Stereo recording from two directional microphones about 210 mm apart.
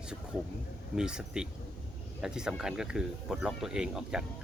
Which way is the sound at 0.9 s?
5° right (ahead or behind).